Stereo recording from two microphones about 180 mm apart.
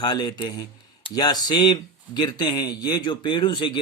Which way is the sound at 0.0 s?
25° left (ahead or behind).